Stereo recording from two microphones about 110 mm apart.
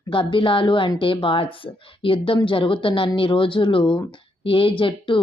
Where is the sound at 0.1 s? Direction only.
50° left (ahead or behind).